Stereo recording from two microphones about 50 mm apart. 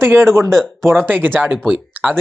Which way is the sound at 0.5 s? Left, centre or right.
Centre.